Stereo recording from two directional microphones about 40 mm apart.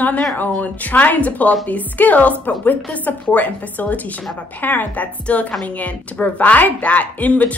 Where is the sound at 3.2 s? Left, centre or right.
Left.